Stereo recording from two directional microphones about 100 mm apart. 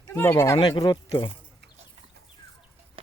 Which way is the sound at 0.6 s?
45° left (ahead or behind).